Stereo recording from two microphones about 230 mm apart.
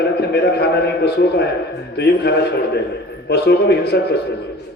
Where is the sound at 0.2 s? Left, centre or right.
Left.